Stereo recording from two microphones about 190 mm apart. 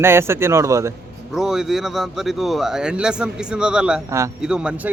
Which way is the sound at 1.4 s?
Centre (ahead or behind).